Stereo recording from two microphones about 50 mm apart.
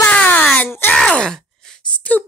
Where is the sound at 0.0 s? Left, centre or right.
Left.